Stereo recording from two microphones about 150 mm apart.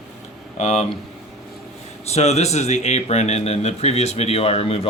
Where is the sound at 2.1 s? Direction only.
45° left (ahead or behind).